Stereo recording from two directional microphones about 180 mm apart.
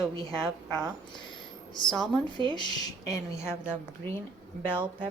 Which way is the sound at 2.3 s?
25° left (ahead or behind).